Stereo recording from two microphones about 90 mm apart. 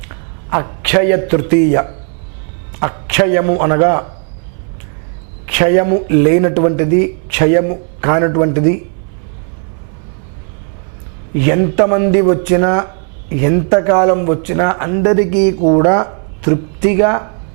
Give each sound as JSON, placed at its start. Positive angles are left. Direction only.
{"t": 0.5, "sound": "speech", "side_deg": -15}
{"t": 5.5, "sound": "speech", "side_deg": -15}
{"t": 11.3, "sound": "speech", "side_deg": -15}